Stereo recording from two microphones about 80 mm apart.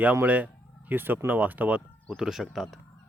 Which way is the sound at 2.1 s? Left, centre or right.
Centre.